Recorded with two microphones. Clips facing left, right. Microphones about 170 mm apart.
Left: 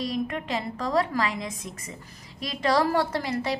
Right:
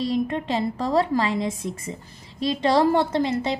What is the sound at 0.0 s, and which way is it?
A woman's voice, 30° right (ahead or behind).